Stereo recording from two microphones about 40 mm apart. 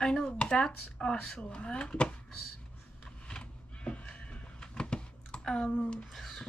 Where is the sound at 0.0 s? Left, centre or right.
Left.